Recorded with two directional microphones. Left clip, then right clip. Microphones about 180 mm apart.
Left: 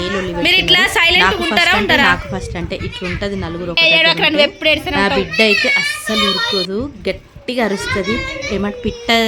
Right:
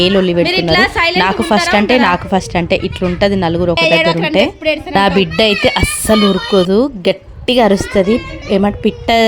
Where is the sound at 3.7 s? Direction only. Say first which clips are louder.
Left 2 dB; 15° right (ahead or behind).